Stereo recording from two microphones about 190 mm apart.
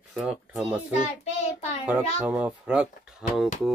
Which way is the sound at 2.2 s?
5° right (ahead or behind).